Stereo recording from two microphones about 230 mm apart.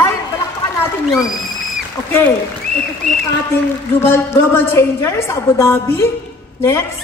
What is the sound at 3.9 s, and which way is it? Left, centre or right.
A woman's voice, centre.